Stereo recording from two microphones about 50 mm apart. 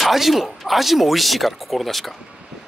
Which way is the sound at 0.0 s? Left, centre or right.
Centre.